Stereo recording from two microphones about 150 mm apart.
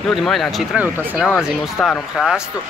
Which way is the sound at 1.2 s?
Centre (ahead or behind).